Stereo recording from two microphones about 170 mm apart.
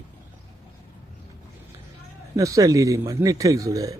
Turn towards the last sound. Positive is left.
turn(degrees=-20)  # may be behind; listen again after turning